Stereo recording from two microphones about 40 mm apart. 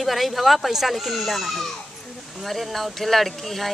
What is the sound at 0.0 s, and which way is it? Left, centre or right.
Speech, centre.